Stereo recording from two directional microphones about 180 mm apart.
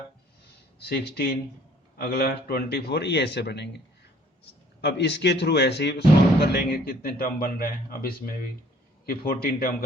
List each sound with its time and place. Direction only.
0.8 s a man's voice: 65° left (ahead or behind)
4.8 s a man's voice: 65° left (ahead or behind)